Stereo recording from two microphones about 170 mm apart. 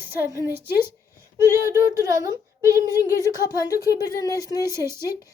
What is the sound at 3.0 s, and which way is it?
Speech, 20° left (ahead or behind).